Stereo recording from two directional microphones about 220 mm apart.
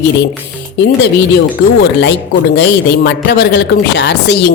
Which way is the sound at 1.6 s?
50° left (ahead or behind).